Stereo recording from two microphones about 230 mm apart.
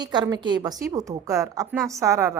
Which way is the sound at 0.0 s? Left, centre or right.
Centre.